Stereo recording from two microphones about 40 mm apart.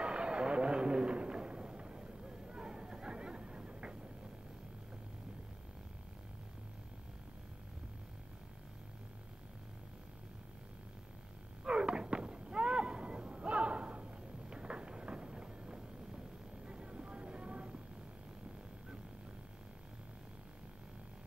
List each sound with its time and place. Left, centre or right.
0.0 s a sound: right
11.6 s artillery fire: right
16.6 s vehicle: right